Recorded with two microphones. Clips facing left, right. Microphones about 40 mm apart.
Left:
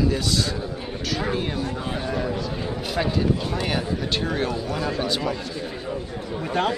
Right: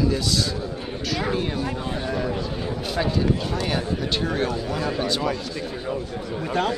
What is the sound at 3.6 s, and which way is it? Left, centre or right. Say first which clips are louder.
Speech: even; centre.